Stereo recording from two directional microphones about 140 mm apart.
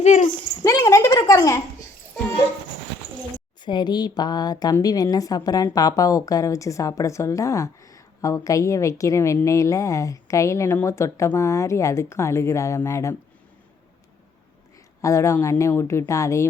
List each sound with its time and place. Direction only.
0.0 s a child's voice: 55° left (ahead or behind)
0.6 s a woman's voice: 20° left (ahead or behind)
3.6 s a woman's voice: 30° left (ahead or behind)
15.0 s a woman's voice: 20° left (ahead or behind)